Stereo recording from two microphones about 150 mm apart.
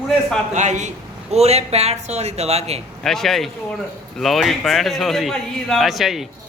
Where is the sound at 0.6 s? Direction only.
50° right (ahead or behind).